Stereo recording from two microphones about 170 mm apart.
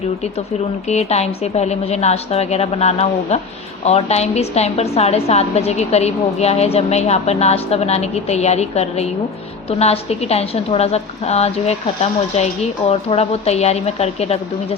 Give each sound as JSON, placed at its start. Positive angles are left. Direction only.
{"t": 0.9, "sound": "a woman's voice", "side_deg": 40}